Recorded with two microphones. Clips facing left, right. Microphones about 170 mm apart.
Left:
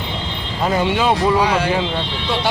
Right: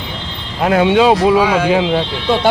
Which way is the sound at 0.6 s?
70° right (ahead or behind).